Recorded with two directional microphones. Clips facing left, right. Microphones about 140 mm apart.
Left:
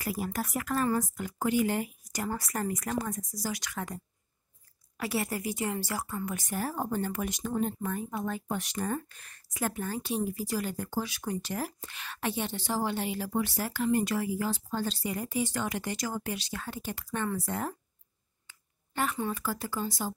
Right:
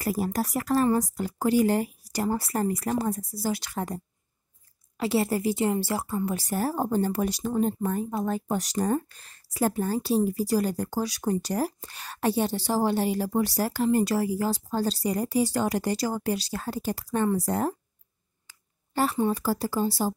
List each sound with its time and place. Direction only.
0.0 s a woman's voice: 35° right (ahead or behind)